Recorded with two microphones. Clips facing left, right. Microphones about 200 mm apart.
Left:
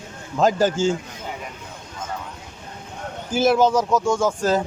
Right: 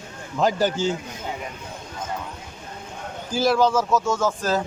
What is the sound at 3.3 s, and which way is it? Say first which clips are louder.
Speech: left 2 dB; 20° left (ahead or behind).